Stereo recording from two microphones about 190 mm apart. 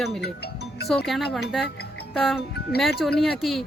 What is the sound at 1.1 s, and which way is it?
A woman's voice, centre (ahead or behind).